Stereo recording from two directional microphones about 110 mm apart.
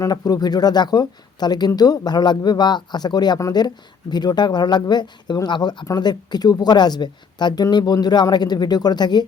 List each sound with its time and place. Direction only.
0.0 s speech: 35° left (ahead or behind)